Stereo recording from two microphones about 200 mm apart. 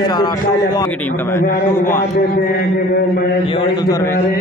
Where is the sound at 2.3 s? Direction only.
50° left (ahead or behind).